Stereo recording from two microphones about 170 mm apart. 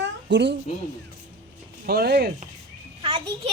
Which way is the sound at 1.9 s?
70° right (ahead or behind).